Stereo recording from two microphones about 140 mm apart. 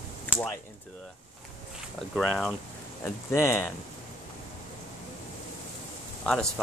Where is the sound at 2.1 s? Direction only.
Centre (ahead or behind).